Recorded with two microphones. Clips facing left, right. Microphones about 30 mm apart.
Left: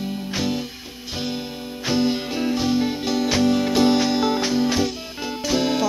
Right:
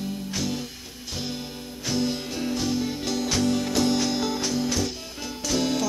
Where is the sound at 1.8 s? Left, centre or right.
Left.